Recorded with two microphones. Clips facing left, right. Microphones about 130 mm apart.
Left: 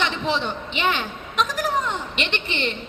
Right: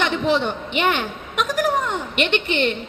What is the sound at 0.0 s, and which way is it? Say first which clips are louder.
A man's voice: right 4 dB; 50° right (ahead or behind).